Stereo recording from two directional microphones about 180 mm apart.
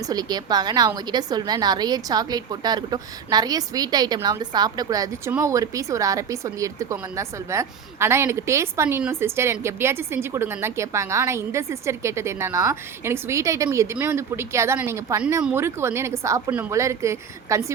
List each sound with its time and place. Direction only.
0.1 s a woman's voice: 20° right (ahead or behind)